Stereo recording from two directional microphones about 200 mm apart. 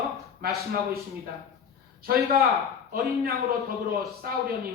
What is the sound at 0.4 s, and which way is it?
Speech, 50° right (ahead or behind).